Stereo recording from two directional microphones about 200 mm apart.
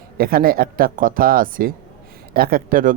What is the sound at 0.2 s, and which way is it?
Speech, 50° right (ahead or behind).